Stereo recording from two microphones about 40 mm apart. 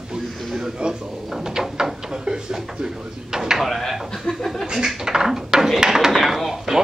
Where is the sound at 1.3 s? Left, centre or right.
Centre.